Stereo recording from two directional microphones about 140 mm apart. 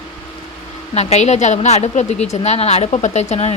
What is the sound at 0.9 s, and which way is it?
A woman's voice, 50° left (ahead or behind).